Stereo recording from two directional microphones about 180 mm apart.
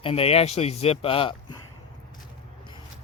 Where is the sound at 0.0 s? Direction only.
30° left (ahead or behind).